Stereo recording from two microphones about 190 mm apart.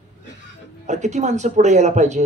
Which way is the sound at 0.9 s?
40° right (ahead or behind).